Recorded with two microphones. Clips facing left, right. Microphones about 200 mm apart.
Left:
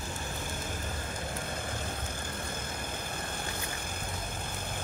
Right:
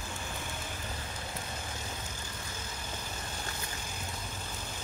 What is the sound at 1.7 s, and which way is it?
Vehicle, 55° left (ahead or behind).